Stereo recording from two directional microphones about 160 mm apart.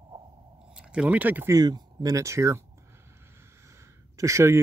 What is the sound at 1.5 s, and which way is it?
Speech, 25° right (ahead or behind).